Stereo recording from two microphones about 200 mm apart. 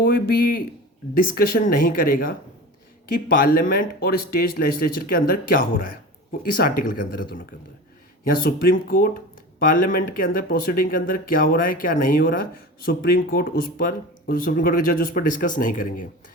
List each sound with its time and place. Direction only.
0.0 s speech: 45° left (ahead or behind)
3.3 s speech: 45° left (ahead or behind)
8.4 s speech: 45° left (ahead or behind)